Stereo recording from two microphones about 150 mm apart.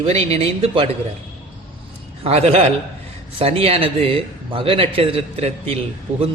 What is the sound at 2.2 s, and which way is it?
A man's voice, 45° right (ahead or behind).